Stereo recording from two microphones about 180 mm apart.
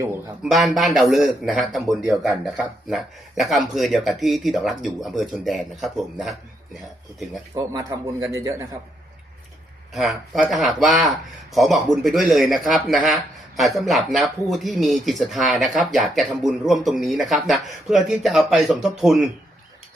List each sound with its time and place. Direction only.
0.4 s speech: centre (ahead or behind)
7.5 s a man's voice: 20° right (ahead or behind)
9.9 s speech: centre (ahead or behind)